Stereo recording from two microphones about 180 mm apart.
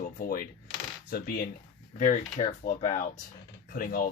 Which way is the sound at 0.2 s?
55° left (ahead or behind).